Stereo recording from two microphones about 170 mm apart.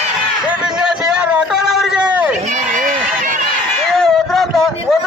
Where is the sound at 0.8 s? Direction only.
5° right (ahead or behind).